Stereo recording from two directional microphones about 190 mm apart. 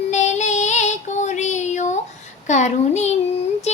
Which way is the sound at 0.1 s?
40° left (ahead or behind).